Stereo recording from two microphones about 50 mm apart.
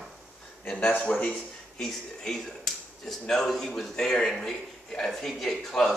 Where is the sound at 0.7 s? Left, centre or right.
Left.